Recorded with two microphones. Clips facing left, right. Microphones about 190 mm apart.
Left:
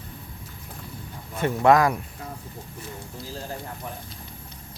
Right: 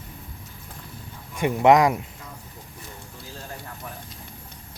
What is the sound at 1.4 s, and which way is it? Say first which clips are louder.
Speech: right 2 dB; 15° right (ahead or behind).